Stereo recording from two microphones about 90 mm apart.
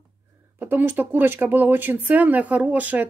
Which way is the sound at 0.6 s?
20° right (ahead or behind).